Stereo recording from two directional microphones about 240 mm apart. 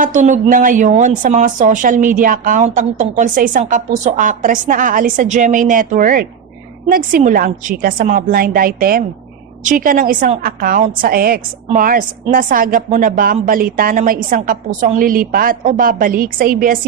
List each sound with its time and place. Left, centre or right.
0.0 s a woman's voice: right